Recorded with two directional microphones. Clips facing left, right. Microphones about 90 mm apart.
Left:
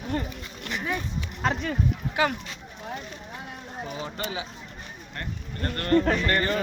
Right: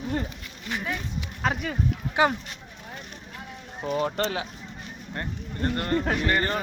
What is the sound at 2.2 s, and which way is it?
Speech, 25° right (ahead or behind).